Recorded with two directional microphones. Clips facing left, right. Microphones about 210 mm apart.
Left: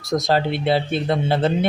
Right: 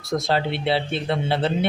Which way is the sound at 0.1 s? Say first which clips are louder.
Left 3 dB; 40° left (ahead or behind).